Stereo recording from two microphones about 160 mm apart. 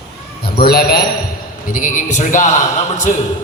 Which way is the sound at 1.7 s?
55° left (ahead or behind).